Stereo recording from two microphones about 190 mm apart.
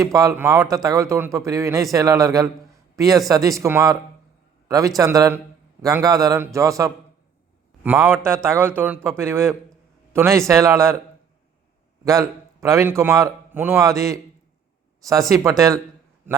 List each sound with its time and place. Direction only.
0.0 s speech: 15° right (ahead or behind)
12.0 s speech: 15° right (ahead or behind)
15.3 s speech: 15° right (ahead or behind)